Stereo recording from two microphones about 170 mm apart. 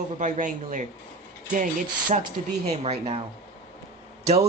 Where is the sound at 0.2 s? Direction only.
50° right (ahead or behind).